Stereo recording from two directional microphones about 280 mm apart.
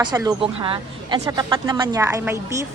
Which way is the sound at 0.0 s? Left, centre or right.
Centre.